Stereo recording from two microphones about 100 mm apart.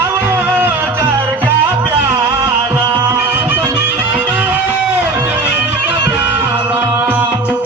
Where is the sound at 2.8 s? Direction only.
50° right (ahead or behind).